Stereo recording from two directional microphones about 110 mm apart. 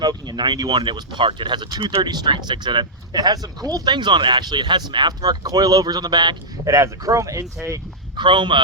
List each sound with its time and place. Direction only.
0.0 s speech: 40° right (ahead or behind)
6.7 s speech: 30° right (ahead or behind)
8.1 s speech: 45° right (ahead or behind)